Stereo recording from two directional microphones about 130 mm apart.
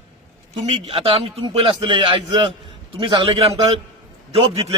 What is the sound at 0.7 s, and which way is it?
Speech, 45° right (ahead or behind).